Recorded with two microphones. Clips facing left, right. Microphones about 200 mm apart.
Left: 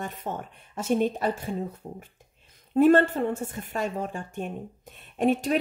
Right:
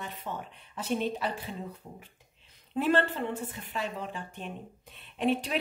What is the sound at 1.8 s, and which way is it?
A woman's voice, 35° left (ahead or behind).